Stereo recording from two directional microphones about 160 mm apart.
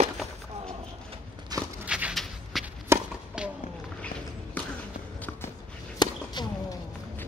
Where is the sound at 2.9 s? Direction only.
10° right (ahead or behind).